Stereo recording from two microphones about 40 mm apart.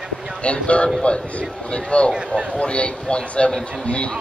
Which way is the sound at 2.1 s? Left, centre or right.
Right.